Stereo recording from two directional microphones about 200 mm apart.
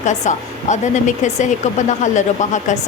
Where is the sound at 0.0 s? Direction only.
35° left (ahead or behind).